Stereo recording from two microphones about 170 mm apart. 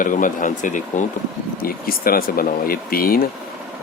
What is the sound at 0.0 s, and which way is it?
Speech, 50° left (ahead or behind).